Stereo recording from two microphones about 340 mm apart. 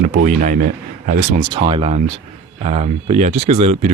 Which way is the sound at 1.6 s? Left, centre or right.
Centre.